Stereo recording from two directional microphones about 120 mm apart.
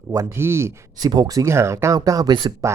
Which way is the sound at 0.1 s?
25° right (ahead or behind).